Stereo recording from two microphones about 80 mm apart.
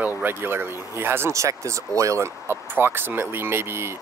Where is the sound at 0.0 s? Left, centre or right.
Right.